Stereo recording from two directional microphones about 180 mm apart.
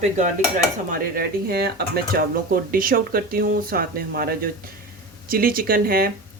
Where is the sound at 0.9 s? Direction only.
55° right (ahead or behind).